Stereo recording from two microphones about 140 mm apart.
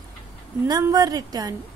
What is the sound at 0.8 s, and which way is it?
Speech, 25° right (ahead or behind).